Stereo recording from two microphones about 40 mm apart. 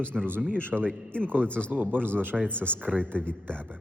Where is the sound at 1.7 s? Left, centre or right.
Right.